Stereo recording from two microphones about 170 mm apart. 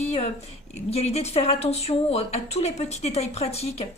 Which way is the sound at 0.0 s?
40° left (ahead or behind).